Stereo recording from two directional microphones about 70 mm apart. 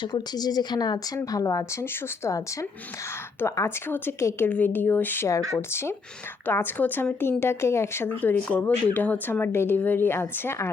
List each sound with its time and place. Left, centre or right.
0.1 s speech: left
3.4 s a woman's voice: left
6.4 s a woman's voice: left
8.2 s speech: left